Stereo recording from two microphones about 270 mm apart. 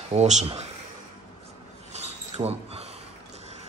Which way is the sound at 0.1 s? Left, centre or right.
Right.